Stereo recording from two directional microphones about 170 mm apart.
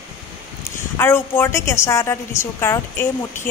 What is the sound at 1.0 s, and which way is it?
A woman's voice, 15° left (ahead or behind).